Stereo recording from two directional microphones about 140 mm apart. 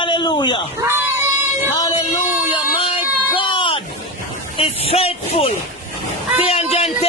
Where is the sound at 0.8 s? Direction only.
15° right (ahead or behind).